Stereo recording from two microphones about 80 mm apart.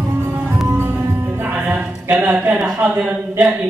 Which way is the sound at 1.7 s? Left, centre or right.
Right.